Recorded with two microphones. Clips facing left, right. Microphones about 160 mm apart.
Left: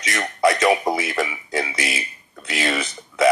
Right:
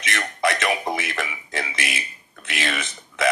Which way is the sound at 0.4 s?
30° left (ahead or behind).